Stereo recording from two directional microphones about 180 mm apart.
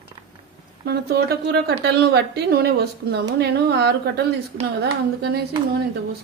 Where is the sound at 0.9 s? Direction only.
60° right (ahead or behind).